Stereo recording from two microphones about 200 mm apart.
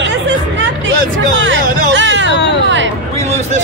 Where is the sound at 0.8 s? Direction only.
70° right (ahead or behind).